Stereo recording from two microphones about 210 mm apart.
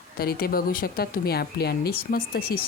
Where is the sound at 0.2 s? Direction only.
45° left (ahead or behind).